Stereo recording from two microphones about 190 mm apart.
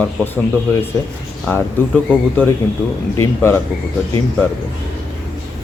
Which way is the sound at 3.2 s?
10° left (ahead or behind).